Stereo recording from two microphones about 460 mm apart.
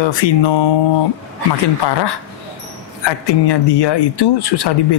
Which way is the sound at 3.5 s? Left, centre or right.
Left.